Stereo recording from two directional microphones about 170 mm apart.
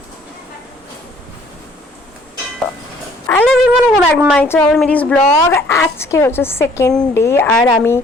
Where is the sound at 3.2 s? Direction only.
5° left (ahead or behind).